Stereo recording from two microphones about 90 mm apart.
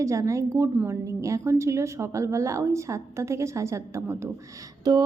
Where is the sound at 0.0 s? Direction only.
35° right (ahead or behind).